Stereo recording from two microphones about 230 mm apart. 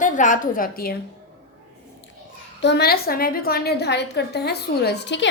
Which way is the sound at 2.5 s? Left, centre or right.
Left.